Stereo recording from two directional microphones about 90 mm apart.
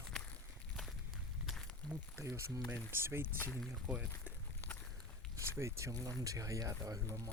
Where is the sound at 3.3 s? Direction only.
25° left (ahead or behind).